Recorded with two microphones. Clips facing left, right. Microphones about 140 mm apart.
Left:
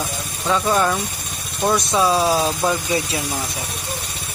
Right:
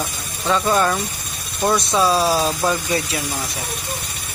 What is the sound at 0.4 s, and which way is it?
Speech, 5° left (ahead or behind).